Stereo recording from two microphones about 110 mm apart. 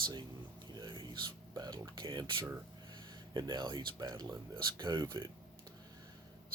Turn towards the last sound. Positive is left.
turn(degrees=-40)  # may be behind; listen again after turning